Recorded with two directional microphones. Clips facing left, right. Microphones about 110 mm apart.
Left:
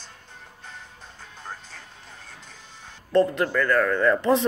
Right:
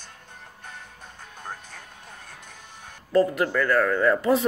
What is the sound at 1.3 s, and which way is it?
Music, 15° right (ahead or behind).